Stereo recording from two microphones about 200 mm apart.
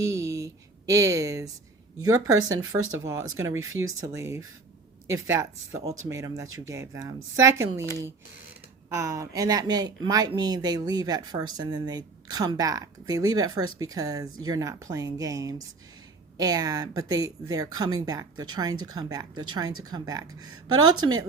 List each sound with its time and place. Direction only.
0.0 s a sound: 15° right (ahead or behind)
2.0 s speech: 15° right (ahead or behind)
8.9 s speech: 15° right (ahead or behind)
19.3 s speech: 90° right
19.8 s speech: 20° right (ahead or behind)